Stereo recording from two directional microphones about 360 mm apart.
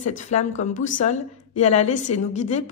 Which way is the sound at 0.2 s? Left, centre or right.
Centre.